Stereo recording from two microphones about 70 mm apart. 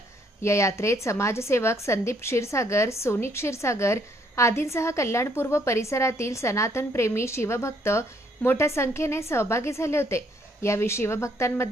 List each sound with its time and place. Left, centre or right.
0.4 s a woman's voice: left